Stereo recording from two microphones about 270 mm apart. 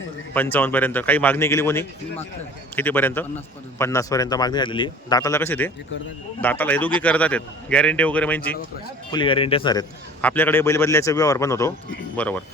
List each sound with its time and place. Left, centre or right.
0.3 s a man's voice: centre
9.1 s speech: centre
10.2 s a man's voice: centre